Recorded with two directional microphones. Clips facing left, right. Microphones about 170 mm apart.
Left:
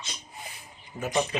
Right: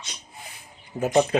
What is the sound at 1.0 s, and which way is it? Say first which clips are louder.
Speech: right 7 dB; 40° right (ahead or behind).